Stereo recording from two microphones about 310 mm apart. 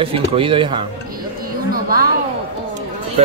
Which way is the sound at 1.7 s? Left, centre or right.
Right.